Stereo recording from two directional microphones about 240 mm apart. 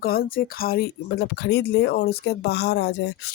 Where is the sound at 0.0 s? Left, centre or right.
Left.